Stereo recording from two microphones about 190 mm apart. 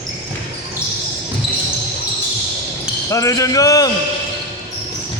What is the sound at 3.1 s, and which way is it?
Speech, 15° left (ahead or behind).